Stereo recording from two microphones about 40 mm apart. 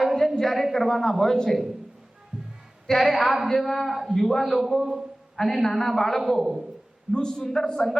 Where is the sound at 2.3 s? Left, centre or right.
Centre.